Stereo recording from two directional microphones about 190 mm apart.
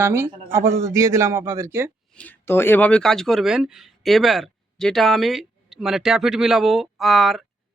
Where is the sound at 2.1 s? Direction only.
10° left (ahead or behind).